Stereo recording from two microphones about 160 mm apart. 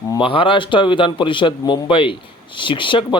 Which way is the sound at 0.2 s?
35° left (ahead or behind).